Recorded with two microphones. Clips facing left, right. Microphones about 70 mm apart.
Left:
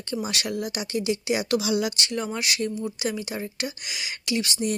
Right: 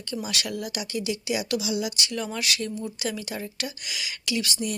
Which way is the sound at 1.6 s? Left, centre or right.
Left.